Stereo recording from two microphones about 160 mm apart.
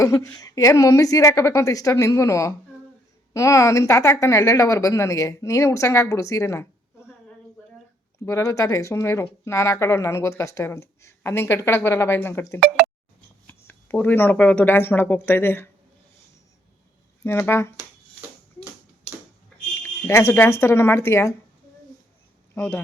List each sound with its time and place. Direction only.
0.0 s a woman's voice: 20° left (ahead or behind)
8.2 s a woman's voice: 20° left (ahead or behind)
17.2 s speech: 15° left (ahead or behind)
19.8 s speech: 15° left (ahead or behind)